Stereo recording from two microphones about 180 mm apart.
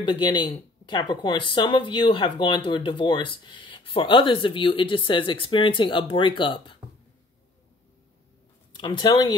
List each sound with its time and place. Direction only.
0.0 s speech: 25° left (ahead or behind)
8.7 s speech: 25° left (ahead or behind)